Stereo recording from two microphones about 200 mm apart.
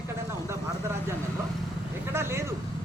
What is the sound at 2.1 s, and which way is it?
Speech, 10° right (ahead or behind).